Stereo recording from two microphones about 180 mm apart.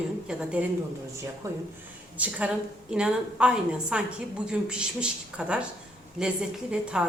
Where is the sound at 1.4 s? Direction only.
15° right (ahead or behind).